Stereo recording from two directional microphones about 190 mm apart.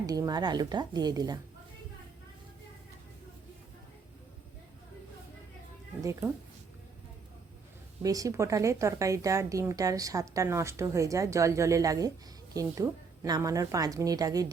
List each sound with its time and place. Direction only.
0.0 s speech: 20° right (ahead or behind)
6.0 s a woman's voice: 15° right (ahead or behind)
8.0 s a woman's voice: 20° right (ahead or behind)